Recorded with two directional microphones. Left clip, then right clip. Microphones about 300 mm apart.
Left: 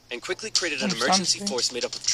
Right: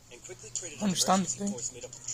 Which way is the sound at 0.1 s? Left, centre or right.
Left.